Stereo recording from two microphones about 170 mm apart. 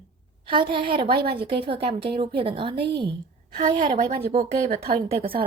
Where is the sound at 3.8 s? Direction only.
50° right (ahead or behind).